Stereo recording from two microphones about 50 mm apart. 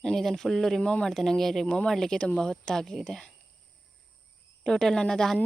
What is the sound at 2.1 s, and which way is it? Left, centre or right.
Speech, left.